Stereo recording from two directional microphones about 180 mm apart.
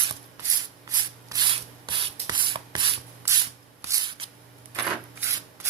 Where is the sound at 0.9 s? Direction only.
25° right (ahead or behind).